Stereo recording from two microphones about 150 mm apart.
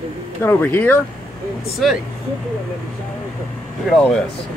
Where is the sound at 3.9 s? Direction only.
5° left (ahead or behind).